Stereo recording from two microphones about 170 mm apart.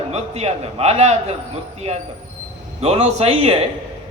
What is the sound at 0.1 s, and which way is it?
A man's voice, 40° right (ahead or behind).